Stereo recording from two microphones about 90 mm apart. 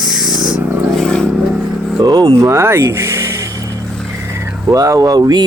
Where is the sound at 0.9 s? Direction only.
10° left (ahead or behind).